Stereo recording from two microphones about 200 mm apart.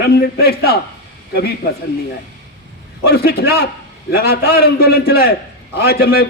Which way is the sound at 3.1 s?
50° left (ahead or behind).